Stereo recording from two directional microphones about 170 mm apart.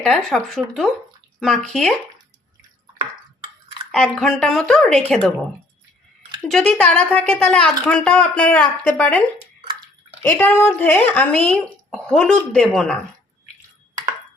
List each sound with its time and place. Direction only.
0.0 s a woman's voice: 5° left (ahead or behind)
3.9 s a woman's voice: 5° left (ahead or behind)
6.5 s speech: 5° left (ahead or behind)
9.6 s bathtub: 30° right (ahead or behind)
10.2 s speech: 10° left (ahead or behind)